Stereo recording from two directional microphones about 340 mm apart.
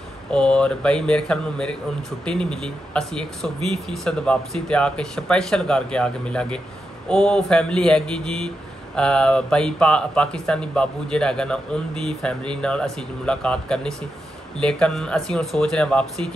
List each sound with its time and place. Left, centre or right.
0.3 s speech: centre